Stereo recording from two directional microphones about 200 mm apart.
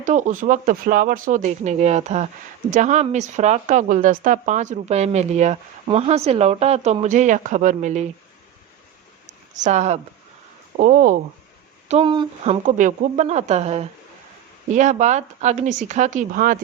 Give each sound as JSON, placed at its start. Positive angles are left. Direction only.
{"t": 0.0, "sound": "speech", "side_deg": -40}
{"t": 9.2, "sound": "a sound", "side_deg": -35}
{"t": 10.8, "sound": "speech", "side_deg": -40}
{"t": 11.9, "sound": "speech", "side_deg": -30}
{"t": 12.6, "sound": "speech", "side_deg": -40}